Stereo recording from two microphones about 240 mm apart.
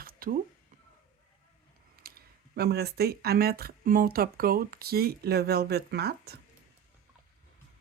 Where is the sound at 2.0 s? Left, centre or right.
Right.